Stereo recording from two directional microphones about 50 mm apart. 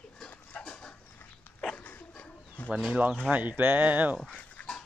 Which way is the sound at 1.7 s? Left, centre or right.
Left.